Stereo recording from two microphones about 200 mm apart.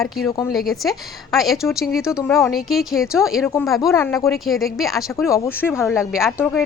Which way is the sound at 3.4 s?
10° left (ahead or behind).